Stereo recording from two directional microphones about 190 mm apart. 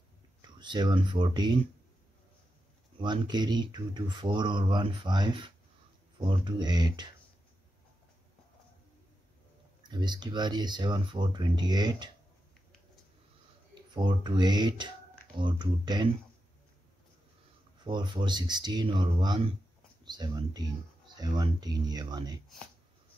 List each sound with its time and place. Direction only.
0.4 s speech: 25° right (ahead or behind)
3.0 s speech: 25° right (ahead or behind)
9.8 s speech: 20° right (ahead or behind)
13.9 s speech: 25° right (ahead or behind)
17.8 s speech: 25° right (ahead or behind)